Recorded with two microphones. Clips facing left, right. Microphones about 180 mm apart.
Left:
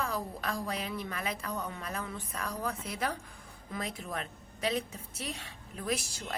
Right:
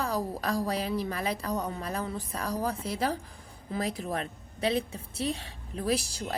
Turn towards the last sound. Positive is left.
turn(degrees=-35)  # may be behind; listen again after turning